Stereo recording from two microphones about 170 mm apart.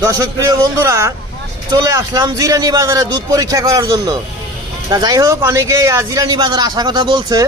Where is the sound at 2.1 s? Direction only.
20° right (ahead or behind).